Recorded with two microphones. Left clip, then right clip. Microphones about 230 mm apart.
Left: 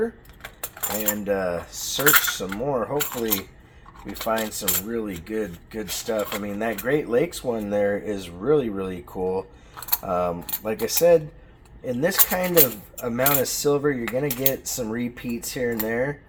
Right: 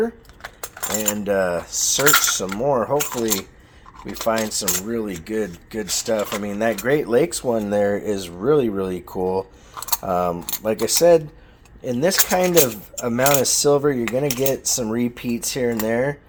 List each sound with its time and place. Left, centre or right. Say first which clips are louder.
0.0 s cutlery: right 3 dB; right
4.0 s speech: right 4 dB; right
4.9 s cutlery: right 3 dB; right
5.2 s speech: right 4 dB; right